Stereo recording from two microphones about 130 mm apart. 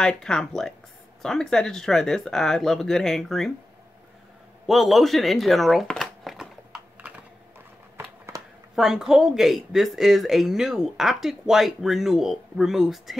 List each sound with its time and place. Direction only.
0.0 s speech: 5° left (ahead or behind)
4.6 s speech: centre (ahead or behind)
8.7 s speech: 5° right (ahead or behind)